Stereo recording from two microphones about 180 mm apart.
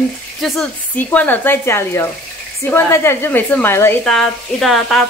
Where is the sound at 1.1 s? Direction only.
10° left (ahead or behind).